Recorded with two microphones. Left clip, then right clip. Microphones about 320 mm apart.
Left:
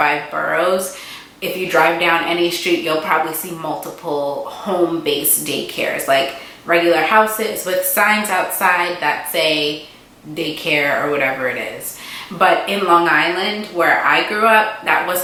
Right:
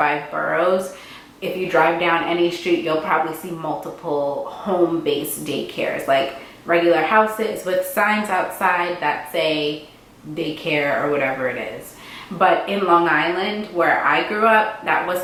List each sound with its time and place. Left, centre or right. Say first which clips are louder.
0.1 s speech: left 3 dB; centre
3.6 s speech: left 2 dB; centre
5.0 s speech: left 3 dB; centre